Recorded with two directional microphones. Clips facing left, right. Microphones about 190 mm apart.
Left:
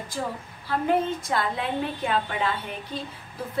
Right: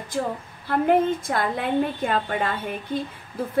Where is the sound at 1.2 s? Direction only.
55° right (ahead or behind).